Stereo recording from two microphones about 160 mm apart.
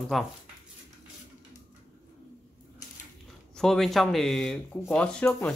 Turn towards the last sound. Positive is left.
turn(degrees=5)  # may be behind; listen again after turning